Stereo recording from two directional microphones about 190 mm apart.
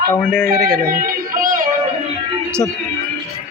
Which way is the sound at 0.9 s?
50° right (ahead or behind).